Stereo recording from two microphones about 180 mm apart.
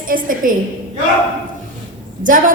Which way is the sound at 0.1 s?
50° right (ahead or behind).